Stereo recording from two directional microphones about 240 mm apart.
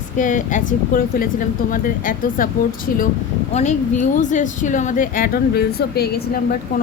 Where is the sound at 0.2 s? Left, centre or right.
Left.